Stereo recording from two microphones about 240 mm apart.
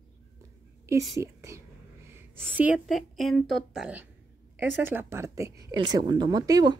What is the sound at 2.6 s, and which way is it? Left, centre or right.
A woman's voice, centre.